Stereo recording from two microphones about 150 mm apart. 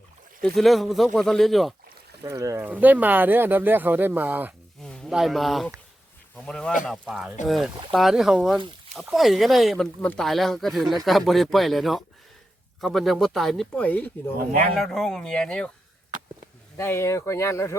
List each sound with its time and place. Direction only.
0.4 s speech: centre (ahead or behind)
2.2 s speech: 20° right (ahead or behind)
4.8 s speech: 5° left (ahead or behind)
16.7 s speech: 15° left (ahead or behind)